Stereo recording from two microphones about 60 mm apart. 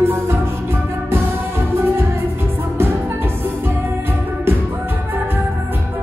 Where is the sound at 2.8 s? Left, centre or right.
Right.